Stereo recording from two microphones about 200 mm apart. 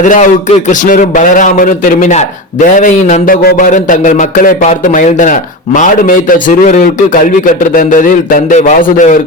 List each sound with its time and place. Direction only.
0.0 s a man's voice: 40° left (ahead or behind)